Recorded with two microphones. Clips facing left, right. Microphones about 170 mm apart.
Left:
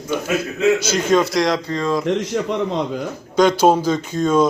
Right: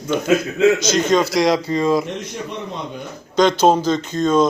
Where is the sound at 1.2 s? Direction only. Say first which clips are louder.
Right 2 dB; centre (ahead or behind).